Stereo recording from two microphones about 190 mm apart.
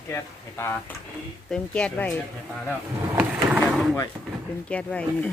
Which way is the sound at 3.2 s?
5° right (ahead or behind).